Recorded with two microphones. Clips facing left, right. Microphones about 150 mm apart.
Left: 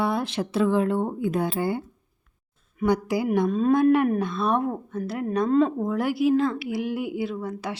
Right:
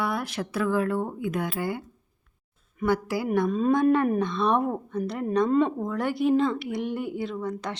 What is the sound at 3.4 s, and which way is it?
A woman's voice, centre (ahead or behind).